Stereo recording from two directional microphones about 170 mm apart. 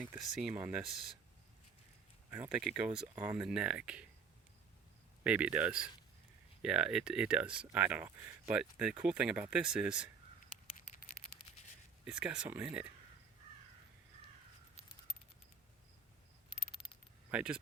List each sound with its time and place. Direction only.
0.3 s speech: 5° right (ahead or behind)
2.3 s speech: 5° right (ahead or behind)
5.2 s speech: 5° right (ahead or behind)
12.0 s speech: 5° right (ahead or behind)
16.5 s a sound: 30° left (ahead or behind)
17.3 s speech: 5° right (ahead or behind)